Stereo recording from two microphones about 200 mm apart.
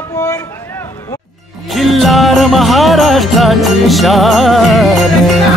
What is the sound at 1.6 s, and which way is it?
Jingle bell, centre (ahead or behind).